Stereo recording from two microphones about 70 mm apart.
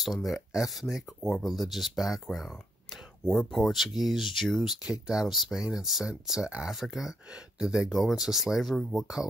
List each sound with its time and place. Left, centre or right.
0.0 s speech: centre